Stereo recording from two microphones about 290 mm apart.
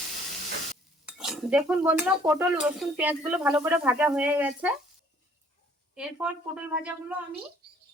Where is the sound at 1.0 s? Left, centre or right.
Centre.